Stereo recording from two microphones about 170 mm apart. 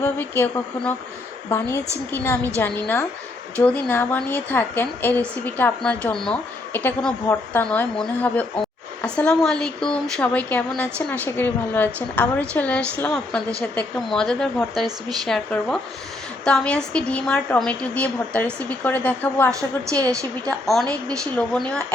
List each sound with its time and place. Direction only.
0.0 s a woman's voice: 10° left (ahead or behind)
19.9 s a woman's voice: 20° right (ahead or behind)
20.5 s a woman's voice: 5° left (ahead or behind)